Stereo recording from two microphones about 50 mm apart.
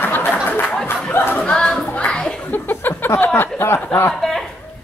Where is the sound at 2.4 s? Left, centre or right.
Left.